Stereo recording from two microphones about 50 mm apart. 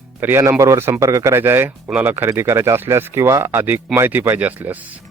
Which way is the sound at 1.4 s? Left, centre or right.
Right.